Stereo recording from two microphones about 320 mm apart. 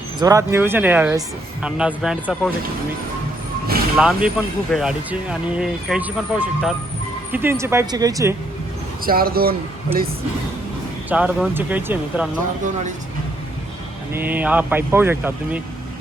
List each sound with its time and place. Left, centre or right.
0.2 s speech: centre
3.9 s speech: centre
9.0 s speech: right
11.1 s speech: centre
14.1 s speech: centre